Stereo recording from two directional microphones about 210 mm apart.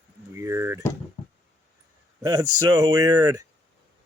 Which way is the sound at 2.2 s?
20° right (ahead or behind).